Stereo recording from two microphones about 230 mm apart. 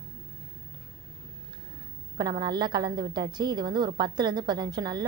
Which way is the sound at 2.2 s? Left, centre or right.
Centre.